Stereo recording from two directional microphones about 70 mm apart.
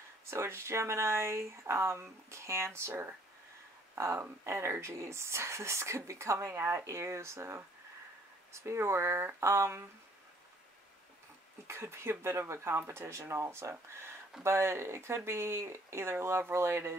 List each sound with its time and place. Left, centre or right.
0.2 s speech: right
3.9 s speech: right
11.6 s speech: right